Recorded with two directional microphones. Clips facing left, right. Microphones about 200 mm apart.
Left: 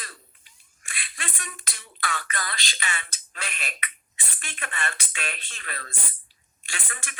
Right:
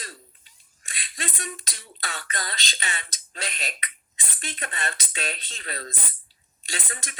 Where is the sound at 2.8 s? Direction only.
35° right (ahead or behind).